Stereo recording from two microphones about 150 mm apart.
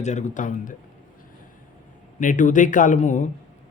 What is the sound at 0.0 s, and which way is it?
Speech, 50° left (ahead or behind).